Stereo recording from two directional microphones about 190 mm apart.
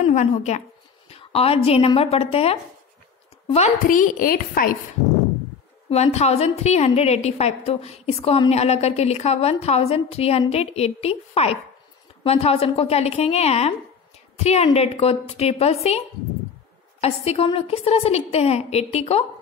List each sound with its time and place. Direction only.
0.0 s a woman's voice: 40° left (ahead or behind)
3.8 s a woman's voice: 45° left (ahead or behind)
5.9 s a woman's voice: 35° left (ahead or behind)
17.0 s a woman's voice: 30° left (ahead or behind)